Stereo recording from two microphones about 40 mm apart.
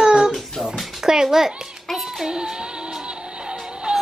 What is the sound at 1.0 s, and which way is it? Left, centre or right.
Speech, centre.